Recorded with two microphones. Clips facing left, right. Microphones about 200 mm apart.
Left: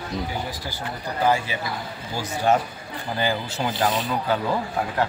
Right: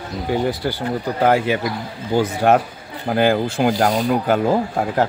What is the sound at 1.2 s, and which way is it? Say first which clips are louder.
Speech: right 6 dB; 60° right (ahead or behind).